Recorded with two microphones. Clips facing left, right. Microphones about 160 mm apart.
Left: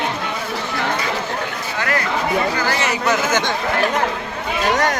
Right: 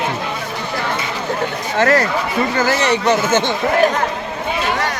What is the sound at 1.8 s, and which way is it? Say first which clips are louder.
Speech: right 7 dB; 40° right (ahead or behind).